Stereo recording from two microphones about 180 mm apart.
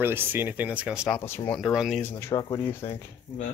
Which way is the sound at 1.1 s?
15° left (ahead or behind).